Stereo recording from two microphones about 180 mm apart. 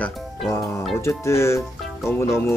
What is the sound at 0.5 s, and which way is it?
Music, 15° left (ahead or behind).